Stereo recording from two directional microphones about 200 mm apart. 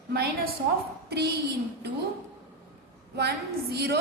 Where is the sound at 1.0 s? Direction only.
55° right (ahead or behind).